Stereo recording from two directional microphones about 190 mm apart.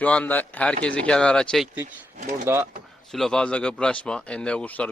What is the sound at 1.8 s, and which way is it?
Speech, 40° right (ahead or behind).